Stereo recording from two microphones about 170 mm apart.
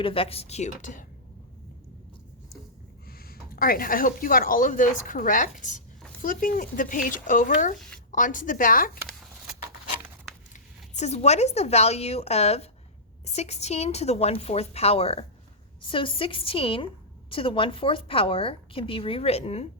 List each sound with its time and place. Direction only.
0.0 s a woman's voice: 35° left (ahead or behind)
3.1 s speech: 60° left (ahead or behind)
10.5 s a woman's voice: 40° left (ahead or behind)